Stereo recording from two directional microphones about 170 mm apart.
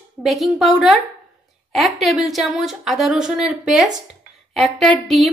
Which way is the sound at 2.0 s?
Centre (ahead or behind).